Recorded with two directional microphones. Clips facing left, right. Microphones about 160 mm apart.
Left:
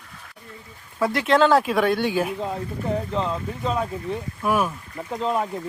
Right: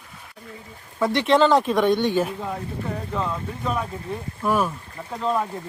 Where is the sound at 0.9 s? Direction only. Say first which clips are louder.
Right 1 dB; centre (ahead or behind).